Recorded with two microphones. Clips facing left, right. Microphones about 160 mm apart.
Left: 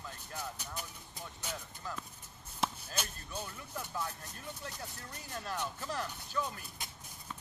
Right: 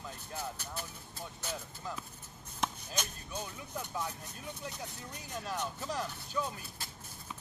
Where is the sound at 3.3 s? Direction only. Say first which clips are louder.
Right 2 dB; 15° right (ahead or behind).